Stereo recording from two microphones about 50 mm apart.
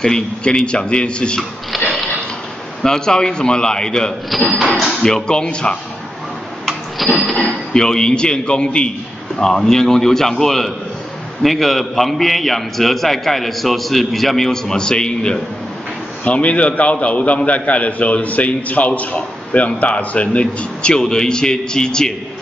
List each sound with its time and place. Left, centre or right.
0.0 s a man's voice: centre
2.8 s a man's voice: centre
4.6 s a sound: centre
5.0 s a man's voice: centre
7.0 s a sound: centre
7.3 s a man's voice: centre
16.3 s a man's voice: left